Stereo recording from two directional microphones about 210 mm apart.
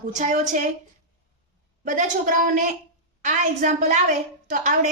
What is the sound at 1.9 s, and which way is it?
A woman's voice, 40° right (ahead or behind).